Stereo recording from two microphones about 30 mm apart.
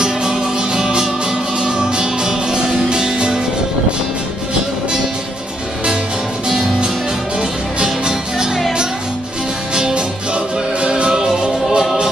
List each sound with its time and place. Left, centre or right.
0.0 s music: right
6.5 s music: right
9.8 s music: right